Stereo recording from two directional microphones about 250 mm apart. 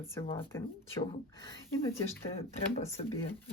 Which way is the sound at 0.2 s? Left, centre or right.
Centre.